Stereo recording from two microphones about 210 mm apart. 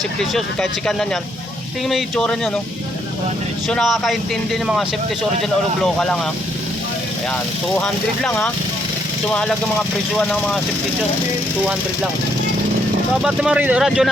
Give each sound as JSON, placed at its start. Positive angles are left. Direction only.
{"t": 0.2, "sound": "speech", "side_deg": 0}
{"t": 3.7, "sound": "speech", "side_deg": 0}
{"t": 7.8, "sound": "speech", "side_deg": 5}
{"t": 13.2, "sound": "speech", "side_deg": -5}